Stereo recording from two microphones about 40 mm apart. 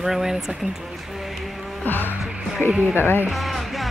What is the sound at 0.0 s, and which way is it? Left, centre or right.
Speech, centre.